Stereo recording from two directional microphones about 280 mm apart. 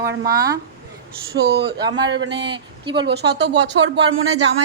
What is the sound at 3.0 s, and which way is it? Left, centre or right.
Speech, right.